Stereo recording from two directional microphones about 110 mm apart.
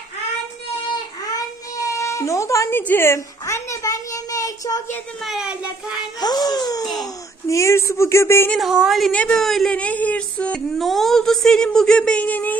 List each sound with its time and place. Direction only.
1.3 s a sound: 30° left (ahead or behind)
5.2 s a woman's voice: centre (ahead or behind)
6.1 s speech: 35° left (ahead or behind)
8.5 s a woman's voice: 5° right (ahead or behind); by 12.5 s 15° left (ahead or behind)